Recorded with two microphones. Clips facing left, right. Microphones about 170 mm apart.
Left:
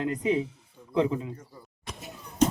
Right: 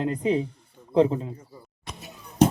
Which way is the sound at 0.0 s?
30° right (ahead or behind).